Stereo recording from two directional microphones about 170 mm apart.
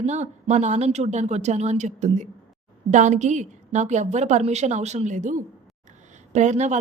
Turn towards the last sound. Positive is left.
turn(degrees=-45)  # may be behind; listen again after turning